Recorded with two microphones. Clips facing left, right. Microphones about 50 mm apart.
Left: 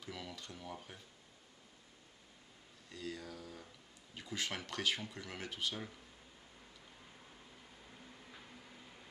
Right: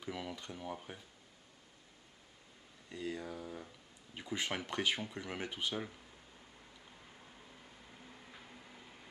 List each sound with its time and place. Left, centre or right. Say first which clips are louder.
0.0 s speech: right 5 dB; centre
2.9 s speech: right 4 dB; centre
7.0 s vehicle: right 1 dB; centre